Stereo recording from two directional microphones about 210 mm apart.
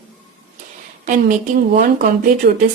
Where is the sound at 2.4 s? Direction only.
50° right (ahead or behind).